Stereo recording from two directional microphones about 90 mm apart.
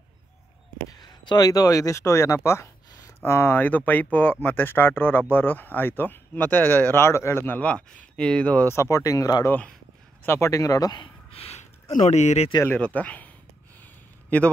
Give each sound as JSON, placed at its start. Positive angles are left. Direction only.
{"t": 0.9, "sound": "speech", "side_deg": 55}
{"t": 8.7, "sound": "speech", "side_deg": 35}
{"t": 9.5, "sound": "speech", "side_deg": 15}
{"t": 10.2, "sound": "speech", "side_deg": 30}
{"t": 11.0, "sound": "a sound", "side_deg": 90}
{"t": 12.6, "sound": "speech", "side_deg": 15}
{"t": 14.3, "sound": "speech", "side_deg": 15}